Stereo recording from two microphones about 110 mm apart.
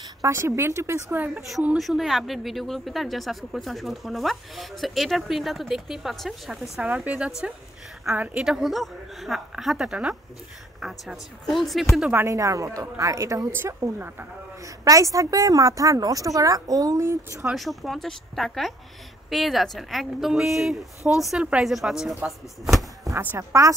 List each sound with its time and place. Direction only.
0.2 s a woman's voice: 25° right (ahead or behind)
1.8 s speech: centre (ahead or behind)
8.5 s speech: centre (ahead or behind)
12.1 s a woman's voice: 25° right (ahead or behind)
14.6 s a woman's voice: 30° right (ahead or behind)
17.5 s speech: centre (ahead or behind)
23.0 s a woman's voice: 25° right (ahead or behind)